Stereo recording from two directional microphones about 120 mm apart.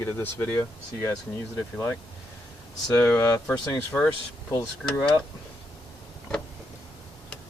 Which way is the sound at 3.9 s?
5° left (ahead or behind).